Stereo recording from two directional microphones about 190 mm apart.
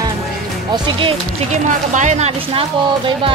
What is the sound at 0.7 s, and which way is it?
Speech, 30° right (ahead or behind).